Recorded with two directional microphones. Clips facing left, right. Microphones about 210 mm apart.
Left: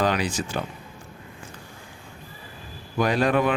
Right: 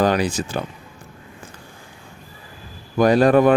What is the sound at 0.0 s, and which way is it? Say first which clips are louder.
Speech: right 5 dB; 40° right (ahead or behind).